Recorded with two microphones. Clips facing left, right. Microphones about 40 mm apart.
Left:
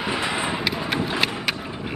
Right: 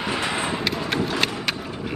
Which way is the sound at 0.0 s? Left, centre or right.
Centre.